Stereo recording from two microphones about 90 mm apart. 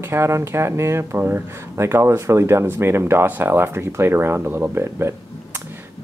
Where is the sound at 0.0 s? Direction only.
30° right (ahead or behind).